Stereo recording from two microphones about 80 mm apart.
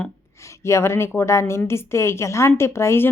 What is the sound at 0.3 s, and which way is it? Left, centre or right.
A woman's voice, left.